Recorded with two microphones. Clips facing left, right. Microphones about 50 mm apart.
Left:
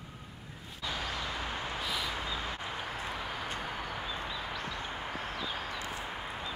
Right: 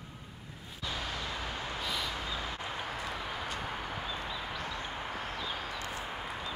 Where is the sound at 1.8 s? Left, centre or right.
Centre.